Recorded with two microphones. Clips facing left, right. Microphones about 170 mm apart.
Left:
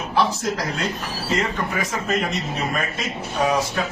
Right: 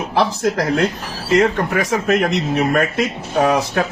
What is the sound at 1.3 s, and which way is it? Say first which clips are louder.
Speech: right 9 dB; 70° right (ahead or behind).